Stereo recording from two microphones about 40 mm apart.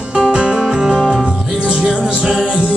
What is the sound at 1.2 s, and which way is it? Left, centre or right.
Music, right.